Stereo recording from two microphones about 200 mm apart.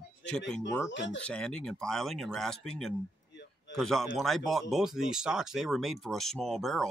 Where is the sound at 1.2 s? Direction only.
5° left (ahead or behind).